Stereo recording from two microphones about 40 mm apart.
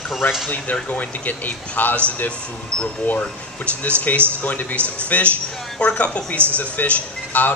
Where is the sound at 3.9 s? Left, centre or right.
Left.